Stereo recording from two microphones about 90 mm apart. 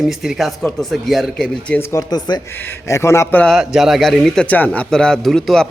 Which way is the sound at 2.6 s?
30° left (ahead or behind).